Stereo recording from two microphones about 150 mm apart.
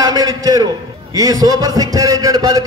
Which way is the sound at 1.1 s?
25° right (ahead or behind).